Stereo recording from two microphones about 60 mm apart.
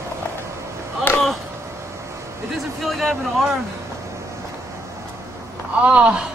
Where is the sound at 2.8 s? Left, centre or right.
Centre.